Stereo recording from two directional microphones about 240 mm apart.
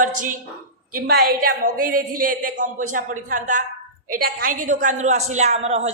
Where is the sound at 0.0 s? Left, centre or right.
Right.